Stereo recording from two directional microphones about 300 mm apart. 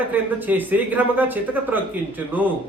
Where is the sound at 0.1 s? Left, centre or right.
Centre.